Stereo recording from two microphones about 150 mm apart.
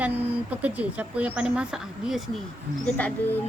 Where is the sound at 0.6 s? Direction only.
10° right (ahead or behind).